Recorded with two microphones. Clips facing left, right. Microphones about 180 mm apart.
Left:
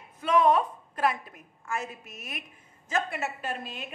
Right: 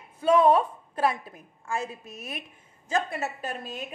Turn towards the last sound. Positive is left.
turn(degrees=-40)  # may be behind; listen again after turning